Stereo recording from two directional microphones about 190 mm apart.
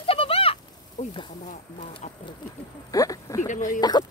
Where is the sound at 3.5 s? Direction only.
40° left (ahead or behind).